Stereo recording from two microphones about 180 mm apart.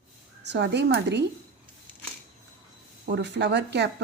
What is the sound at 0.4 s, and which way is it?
Speech, 70° right (ahead or behind).